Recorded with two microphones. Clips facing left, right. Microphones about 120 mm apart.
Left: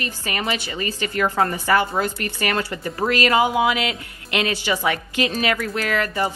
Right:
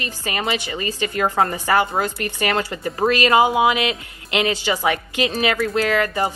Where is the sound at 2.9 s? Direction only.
25° right (ahead or behind).